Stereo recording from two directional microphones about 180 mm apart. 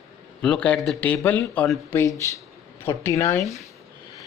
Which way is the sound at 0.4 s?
5° left (ahead or behind).